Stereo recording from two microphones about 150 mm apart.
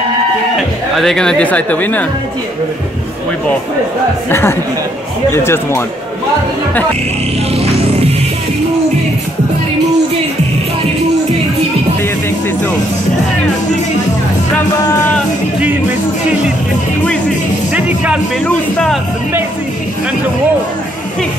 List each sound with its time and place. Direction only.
0.9 s speech: 5° left (ahead or behind)
4.3 s speech: 15° left (ahead or behind)
17.7 s music: 10° right (ahead or behind)
18.4 s speech: 5° left (ahead or behind)